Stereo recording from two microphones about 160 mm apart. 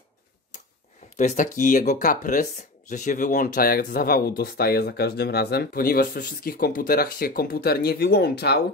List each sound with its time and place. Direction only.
1.1 s speech: 50° left (ahead or behind); by 8.6 s 90° left